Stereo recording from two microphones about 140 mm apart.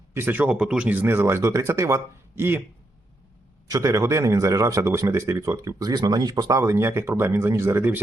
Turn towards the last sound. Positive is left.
turn(degrees=-15)  # may be behind; listen again after turning